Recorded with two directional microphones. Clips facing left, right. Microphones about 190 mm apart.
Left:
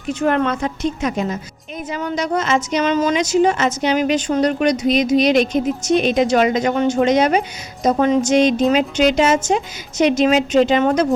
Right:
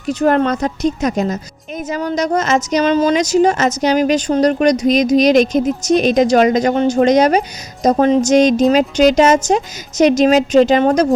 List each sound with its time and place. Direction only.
0.1 s a woman's voice: 40° right (ahead or behind)